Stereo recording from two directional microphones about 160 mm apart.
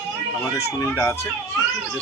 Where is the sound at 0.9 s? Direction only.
15° left (ahead or behind).